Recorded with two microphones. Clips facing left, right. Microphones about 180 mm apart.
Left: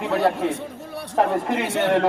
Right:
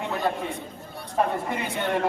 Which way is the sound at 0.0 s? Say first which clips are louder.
Left 6 dB; 75° left (ahead or behind).